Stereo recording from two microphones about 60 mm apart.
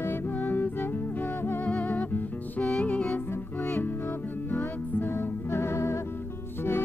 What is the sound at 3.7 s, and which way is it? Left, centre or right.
Music, left.